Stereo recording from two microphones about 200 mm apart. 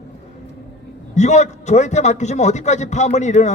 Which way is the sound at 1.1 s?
35° left (ahead or behind).